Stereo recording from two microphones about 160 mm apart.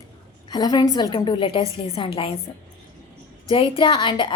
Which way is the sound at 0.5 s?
25° left (ahead or behind).